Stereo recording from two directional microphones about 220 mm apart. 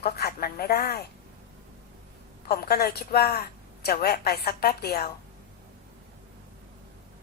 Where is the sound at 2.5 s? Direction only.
45° left (ahead or behind).